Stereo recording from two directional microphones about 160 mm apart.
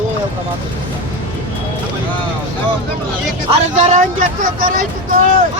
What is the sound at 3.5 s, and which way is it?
Speech, 45° right (ahead or behind).